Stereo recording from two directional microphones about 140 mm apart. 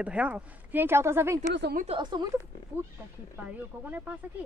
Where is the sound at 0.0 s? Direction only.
10° right (ahead or behind).